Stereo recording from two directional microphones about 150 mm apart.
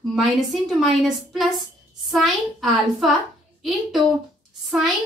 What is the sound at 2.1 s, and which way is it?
A woman's voice, centre (ahead or behind).